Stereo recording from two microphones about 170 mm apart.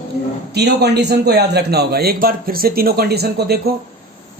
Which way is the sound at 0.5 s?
75° right (ahead or behind).